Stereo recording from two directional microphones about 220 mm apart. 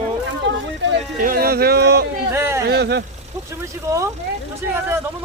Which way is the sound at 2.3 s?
10° right (ahead or behind).